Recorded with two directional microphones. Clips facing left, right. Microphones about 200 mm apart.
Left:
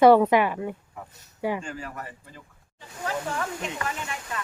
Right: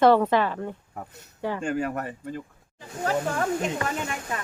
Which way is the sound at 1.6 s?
60° right (ahead or behind).